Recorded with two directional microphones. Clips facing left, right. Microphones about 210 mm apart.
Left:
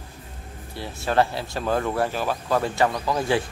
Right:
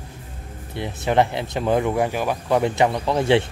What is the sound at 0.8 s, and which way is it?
Speech, 20° right (ahead or behind).